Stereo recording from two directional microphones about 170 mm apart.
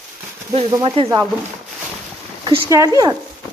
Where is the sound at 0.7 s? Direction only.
25° right (ahead or behind).